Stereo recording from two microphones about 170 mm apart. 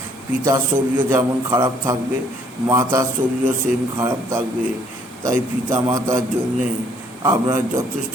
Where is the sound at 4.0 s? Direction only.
15° right (ahead or behind).